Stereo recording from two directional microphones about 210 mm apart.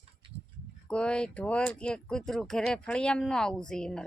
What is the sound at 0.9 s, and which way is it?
Speech, 5° left (ahead or behind).